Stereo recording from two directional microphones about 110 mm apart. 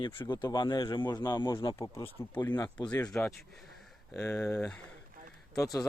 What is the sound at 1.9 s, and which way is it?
Speech, 20° left (ahead or behind).